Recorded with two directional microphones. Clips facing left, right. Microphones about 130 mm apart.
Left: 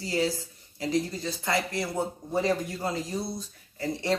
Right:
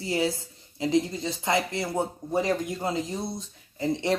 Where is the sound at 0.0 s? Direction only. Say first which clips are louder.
Right 1 dB; 25° right (ahead or behind).